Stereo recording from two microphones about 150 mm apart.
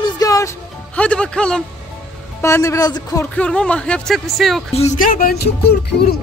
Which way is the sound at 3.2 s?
10° left (ahead or behind).